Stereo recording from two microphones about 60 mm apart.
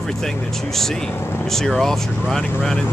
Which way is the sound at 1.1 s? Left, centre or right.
Left.